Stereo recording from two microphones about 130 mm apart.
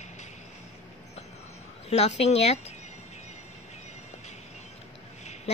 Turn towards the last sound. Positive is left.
turn(degrees=60)  # may be behind; listen again after turning